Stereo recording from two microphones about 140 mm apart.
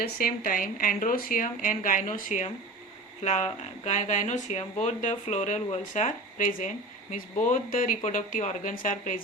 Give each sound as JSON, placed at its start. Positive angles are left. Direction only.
{"t": 0.0, "sound": "speech", "side_deg": 90}
{"t": 3.2, "sound": "speech", "side_deg": 50}